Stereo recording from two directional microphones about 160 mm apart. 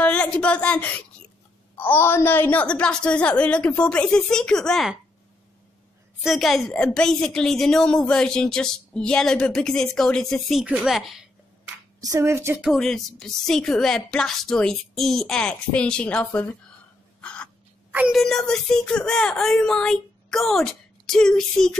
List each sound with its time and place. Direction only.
0.0 s a woman's voice: 5° left (ahead or behind)
6.2 s speech: centre (ahead or behind)
12.0 s speech: 20° right (ahead or behind)
12.6 s speech: centre (ahead or behind)
17.2 s crow: 5° left (ahead or behind)
17.9 s speech: 5° right (ahead or behind)